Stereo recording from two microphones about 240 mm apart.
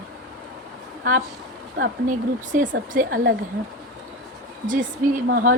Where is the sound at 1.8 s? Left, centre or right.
Right.